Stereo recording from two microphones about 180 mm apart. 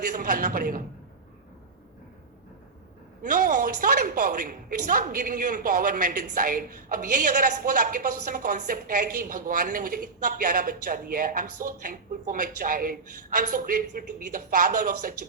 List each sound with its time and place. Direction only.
0.0 s a woman's voice: 50° right (ahead or behind)
3.2 s a woman's voice: 50° right (ahead or behind)